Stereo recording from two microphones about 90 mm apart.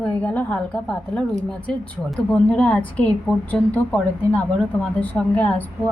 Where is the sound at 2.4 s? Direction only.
15° left (ahead or behind).